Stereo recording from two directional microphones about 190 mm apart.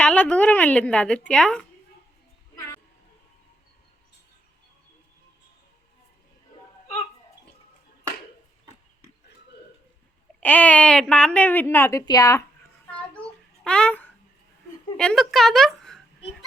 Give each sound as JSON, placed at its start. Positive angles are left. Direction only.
{"t": 0.0, "sound": "a woman's voice", "side_deg": 5}
{"t": 10.4, "sound": "speech", "side_deg": 10}
{"t": 12.9, "sound": "child singing", "side_deg": 5}
{"t": 13.7, "sound": "a child's voice", "side_deg": 5}